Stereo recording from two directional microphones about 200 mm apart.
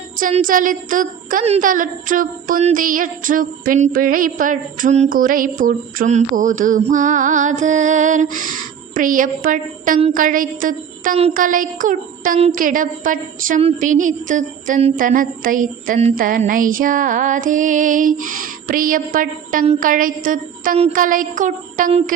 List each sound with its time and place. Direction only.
0.2 s a woman's voice: 40° right (ahead or behind)